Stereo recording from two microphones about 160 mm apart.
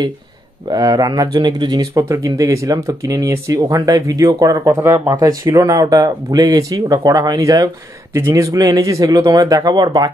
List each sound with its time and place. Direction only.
0.7 s speech: 25° right (ahead or behind)